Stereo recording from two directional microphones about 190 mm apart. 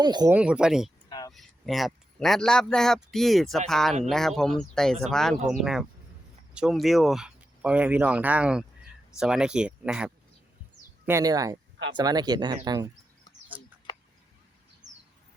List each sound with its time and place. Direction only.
0.0 s speech: 20° right (ahead or behind)
0.3 s speech: 5° right (ahead or behind)
11.0 s speech: 15° right (ahead or behind)
14.8 s bird: 40° right (ahead or behind)